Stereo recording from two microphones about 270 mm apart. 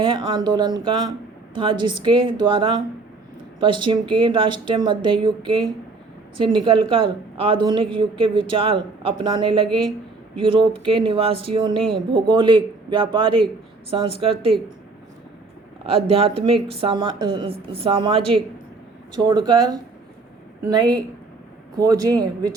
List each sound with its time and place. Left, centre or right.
0.0 s a woman's voice: centre
16.0 s a woman's voice: right